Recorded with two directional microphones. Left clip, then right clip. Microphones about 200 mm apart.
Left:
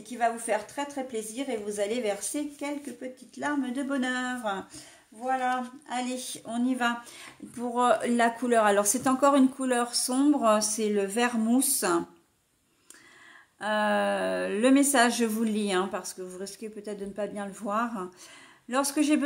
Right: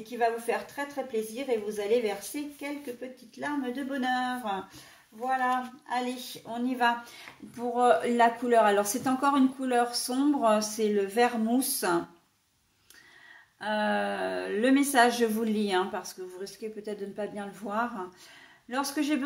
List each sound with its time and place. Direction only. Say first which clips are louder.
0.0 s a woman's voice: even; 50° left (ahead or behind)
5.9 s a woman's voice: right 1 dB; 50° left (ahead or behind)
13.6 s a woman's voice: left 2 dB; 35° left (ahead or behind)